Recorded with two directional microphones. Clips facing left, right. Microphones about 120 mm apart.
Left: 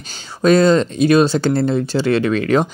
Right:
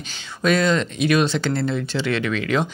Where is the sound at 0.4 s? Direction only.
35° left (ahead or behind).